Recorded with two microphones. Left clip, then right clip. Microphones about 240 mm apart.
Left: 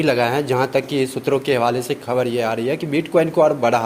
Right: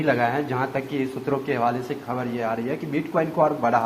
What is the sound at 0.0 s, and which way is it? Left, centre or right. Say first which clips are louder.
Speech: left 4 dB; left.